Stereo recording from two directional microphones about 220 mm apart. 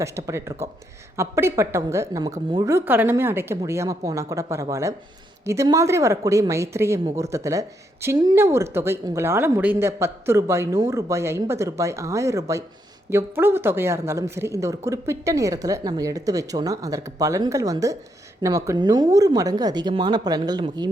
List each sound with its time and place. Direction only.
0.0 s speech: 15° right (ahead or behind)